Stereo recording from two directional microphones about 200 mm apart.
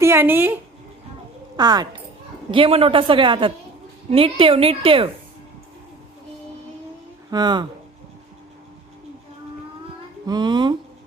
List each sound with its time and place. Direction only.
0.0 s speech: 10° right (ahead or behind)
1.5 s a woman's voice: 20° right (ahead or behind)
7.3 s speech: 20° right (ahead or behind)
10.2 s a woman's voice: 20° right (ahead or behind)